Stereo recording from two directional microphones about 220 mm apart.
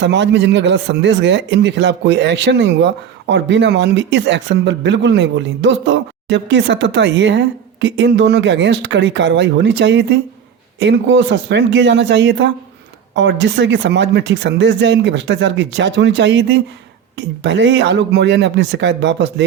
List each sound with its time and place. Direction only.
0.0 s a man's voice: 55° right (ahead or behind)